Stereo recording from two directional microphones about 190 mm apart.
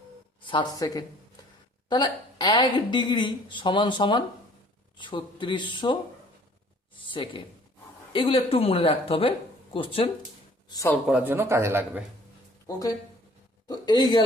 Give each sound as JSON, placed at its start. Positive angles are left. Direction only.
{"t": 0.4, "sound": "a woman's voice", "side_deg": 25}
{"t": 10.7, "sound": "speech", "side_deg": 15}
{"t": 11.0, "sound": "speech", "side_deg": -5}
{"t": 13.7, "sound": "a woman's voice", "side_deg": 20}